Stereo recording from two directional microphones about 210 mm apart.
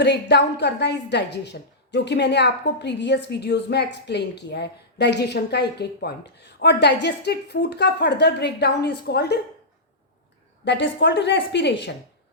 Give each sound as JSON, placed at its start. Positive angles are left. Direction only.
{"t": 0.0, "sound": "a woman's voice", "side_deg": 55}
{"t": 10.7, "sound": "a woman's voice", "side_deg": 55}